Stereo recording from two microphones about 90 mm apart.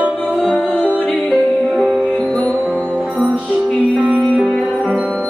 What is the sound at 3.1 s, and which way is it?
Music, 15° right (ahead or behind).